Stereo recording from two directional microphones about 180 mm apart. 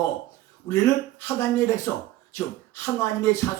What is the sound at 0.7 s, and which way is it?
A man's voice, 20° left (ahead or behind).